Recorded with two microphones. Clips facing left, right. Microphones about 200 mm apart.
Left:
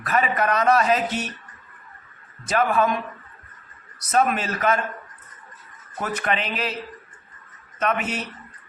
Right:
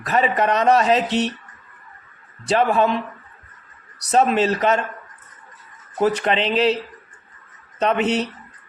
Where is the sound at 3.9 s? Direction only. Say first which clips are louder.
Right 4 dB; 30° right (ahead or behind).